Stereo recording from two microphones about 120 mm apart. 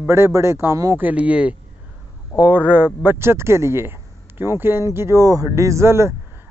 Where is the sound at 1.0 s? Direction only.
10° right (ahead or behind).